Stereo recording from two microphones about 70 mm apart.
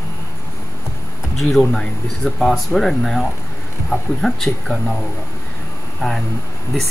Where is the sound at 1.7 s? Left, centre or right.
Centre.